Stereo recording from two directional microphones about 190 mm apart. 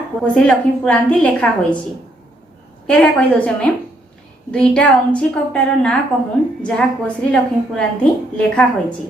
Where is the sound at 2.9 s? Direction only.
5° left (ahead or behind).